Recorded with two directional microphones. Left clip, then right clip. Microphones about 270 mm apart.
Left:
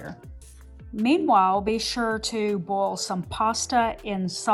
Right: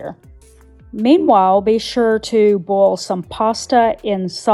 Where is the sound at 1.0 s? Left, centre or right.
Right.